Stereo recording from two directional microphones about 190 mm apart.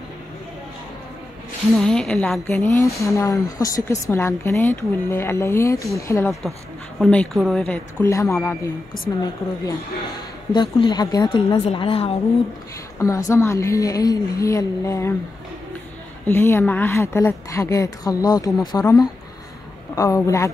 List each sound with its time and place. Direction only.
1.8 s a woman's voice: 5° left (ahead or behind)
7.0 s speech: 5° left (ahead or behind)
10.5 s a woman's voice: 25° left (ahead or behind)
13.0 s speech: 15° left (ahead or behind)
16.3 s a woman's voice: 10° left (ahead or behind)